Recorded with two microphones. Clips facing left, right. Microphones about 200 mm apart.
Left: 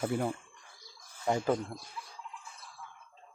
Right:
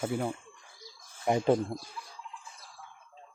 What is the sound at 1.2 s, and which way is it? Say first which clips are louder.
Speech: right 4 dB; 20° right (ahead or behind).